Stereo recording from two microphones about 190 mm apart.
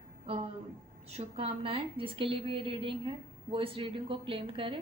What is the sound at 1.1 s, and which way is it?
A woman's voice, 30° right (ahead or behind).